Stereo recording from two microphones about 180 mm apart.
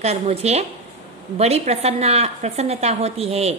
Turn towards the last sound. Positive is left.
turn(degrees=-35)  # may be behind; listen again after turning